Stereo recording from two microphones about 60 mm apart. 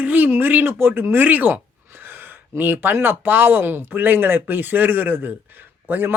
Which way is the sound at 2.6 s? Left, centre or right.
Right.